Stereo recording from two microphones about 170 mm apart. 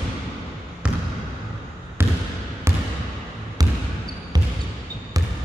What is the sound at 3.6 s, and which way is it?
Basketball bounce, 20° right (ahead or behind).